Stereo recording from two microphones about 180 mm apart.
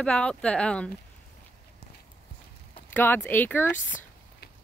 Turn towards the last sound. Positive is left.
turn(degrees=10)  # may be behind; listen again after turning